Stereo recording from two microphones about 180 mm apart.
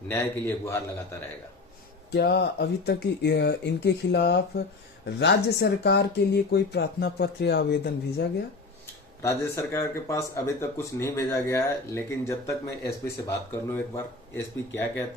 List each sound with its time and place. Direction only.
0.1 s speech: 10° left (ahead or behind)
2.1 s speech: 60° left (ahead or behind)
9.2 s speech: 15° left (ahead or behind)